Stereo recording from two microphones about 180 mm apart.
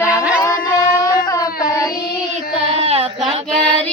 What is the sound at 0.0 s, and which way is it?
Music, 10° right (ahead or behind).